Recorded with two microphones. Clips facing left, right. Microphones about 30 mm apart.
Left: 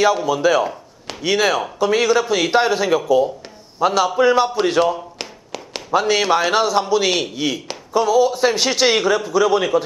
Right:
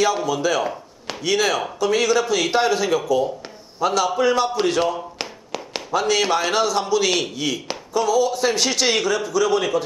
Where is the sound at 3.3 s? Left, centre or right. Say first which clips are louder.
Right 1 dB; centre.